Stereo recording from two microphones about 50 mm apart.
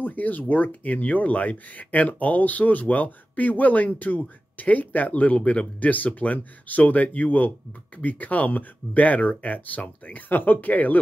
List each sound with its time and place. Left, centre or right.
0.0 s speech: left